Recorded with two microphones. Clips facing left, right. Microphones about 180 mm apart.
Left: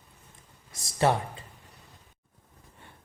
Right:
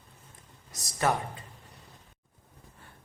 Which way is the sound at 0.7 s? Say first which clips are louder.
Left 3 dB; 25° left (ahead or behind).